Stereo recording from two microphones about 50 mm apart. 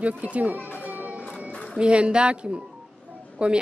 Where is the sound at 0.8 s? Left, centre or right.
Right.